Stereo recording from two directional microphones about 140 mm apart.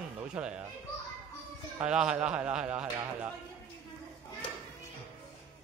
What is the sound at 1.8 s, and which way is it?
Speech, 5° right (ahead or behind).